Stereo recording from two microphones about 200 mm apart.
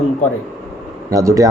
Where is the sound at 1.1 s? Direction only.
15° right (ahead or behind).